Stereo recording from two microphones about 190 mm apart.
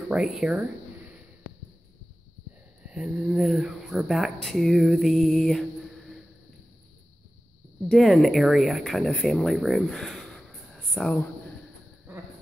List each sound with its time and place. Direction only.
0.1 s speech: 5° right (ahead or behind)
2.8 s speech: 5° right (ahead or behind)
7.9 s speech: centre (ahead or behind)